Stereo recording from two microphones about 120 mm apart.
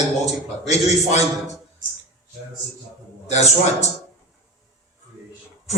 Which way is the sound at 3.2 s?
65° left (ahead or behind).